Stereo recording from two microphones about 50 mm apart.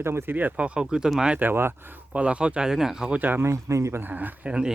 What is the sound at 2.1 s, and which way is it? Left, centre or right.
Speech, right.